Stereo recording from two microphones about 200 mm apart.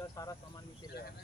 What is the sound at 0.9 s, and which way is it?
Speech, 50° left (ahead or behind).